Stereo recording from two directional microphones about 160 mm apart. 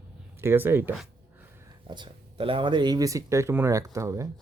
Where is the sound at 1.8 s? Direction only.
30° right (ahead or behind).